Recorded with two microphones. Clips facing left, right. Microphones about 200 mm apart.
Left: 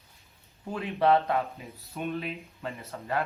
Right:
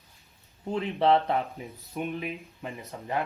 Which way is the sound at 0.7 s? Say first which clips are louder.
Right 1 dB; 25° right (ahead or behind).